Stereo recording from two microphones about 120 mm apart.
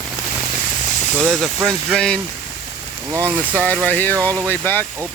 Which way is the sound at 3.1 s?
20° right (ahead or behind).